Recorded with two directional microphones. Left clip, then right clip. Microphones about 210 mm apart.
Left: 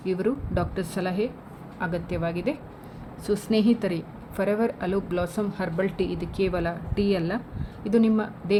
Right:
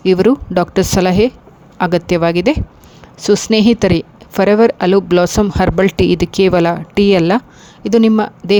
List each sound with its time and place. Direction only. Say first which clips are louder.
0.0 s a woman's voice: right 15 dB; 50° right (ahead or behind)